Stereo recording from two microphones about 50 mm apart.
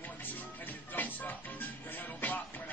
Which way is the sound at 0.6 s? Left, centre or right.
Left.